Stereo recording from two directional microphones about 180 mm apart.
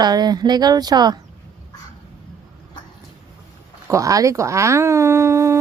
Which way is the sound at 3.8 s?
20° right (ahead or behind).